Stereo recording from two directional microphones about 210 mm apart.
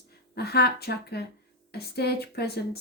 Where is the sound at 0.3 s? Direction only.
50° left (ahead or behind).